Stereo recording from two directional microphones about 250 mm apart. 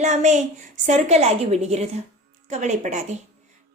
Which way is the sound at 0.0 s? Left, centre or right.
Right.